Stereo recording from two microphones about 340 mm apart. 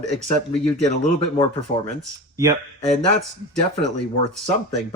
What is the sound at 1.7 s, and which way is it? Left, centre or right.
Speech, left.